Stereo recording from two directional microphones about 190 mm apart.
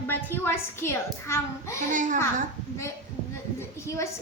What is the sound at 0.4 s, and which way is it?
Child singing, 10° left (ahead or behind).